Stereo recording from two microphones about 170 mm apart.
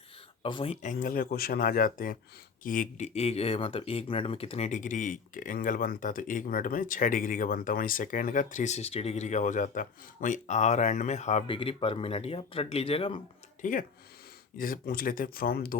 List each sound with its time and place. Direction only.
0.4 s speech: 30° left (ahead or behind)
0.8 s speech: 50° left (ahead or behind)
3.2 s speech: 35° left (ahead or behind)
13.6 s speech: 50° left (ahead or behind)